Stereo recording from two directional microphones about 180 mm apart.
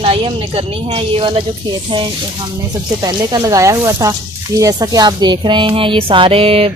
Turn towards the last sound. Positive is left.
turn(degrees=-30)  # may be behind; listen again after turning